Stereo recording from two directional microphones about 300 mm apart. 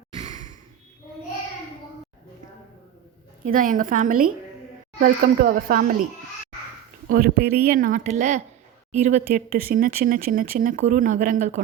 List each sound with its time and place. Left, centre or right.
0.3 s sigh: right
3.4 s speech: right
7.1 s speech: right